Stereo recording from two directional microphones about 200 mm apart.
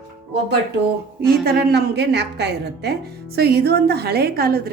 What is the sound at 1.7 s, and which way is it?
A woman's voice, 55° right (ahead or behind).